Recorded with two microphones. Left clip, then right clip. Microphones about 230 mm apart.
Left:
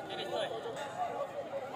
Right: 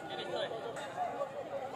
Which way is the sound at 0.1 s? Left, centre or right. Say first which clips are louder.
Left 1 dB; left.